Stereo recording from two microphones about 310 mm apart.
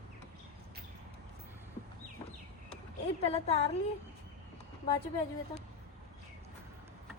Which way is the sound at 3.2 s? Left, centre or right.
Left.